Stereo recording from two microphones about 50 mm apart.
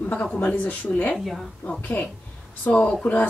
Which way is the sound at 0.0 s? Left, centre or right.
Left.